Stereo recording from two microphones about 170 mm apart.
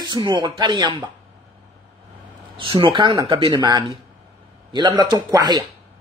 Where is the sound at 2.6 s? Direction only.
30° right (ahead or behind).